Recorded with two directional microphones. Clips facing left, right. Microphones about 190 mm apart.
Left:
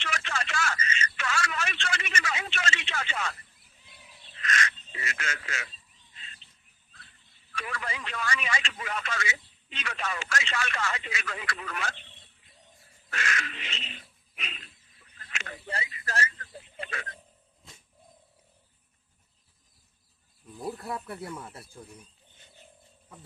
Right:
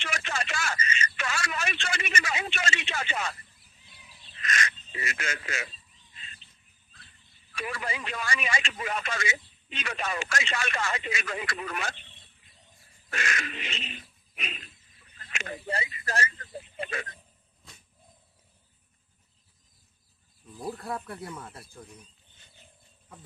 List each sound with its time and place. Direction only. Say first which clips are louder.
0.0 s telephone: right 1 dB; 10° right (ahead or behind)
4.4 s a sound: left 1 dB; 15° right (ahead or behind)
7.5 s speech: right 2 dB; 15° right (ahead or behind)
13.1 s crow: right 1 dB; 15° right (ahead or behind)
15.4 s speech: right 4 dB; 25° right (ahead or behind)
20.6 s speech: even; centre (ahead or behind)